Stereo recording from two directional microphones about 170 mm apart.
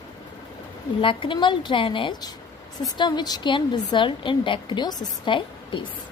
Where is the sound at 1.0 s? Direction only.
30° left (ahead or behind).